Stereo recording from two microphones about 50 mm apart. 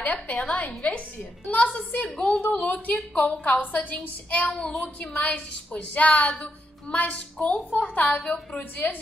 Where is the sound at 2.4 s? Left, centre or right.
Left.